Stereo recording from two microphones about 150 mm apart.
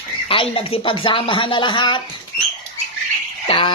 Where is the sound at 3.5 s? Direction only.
35° left (ahead or behind).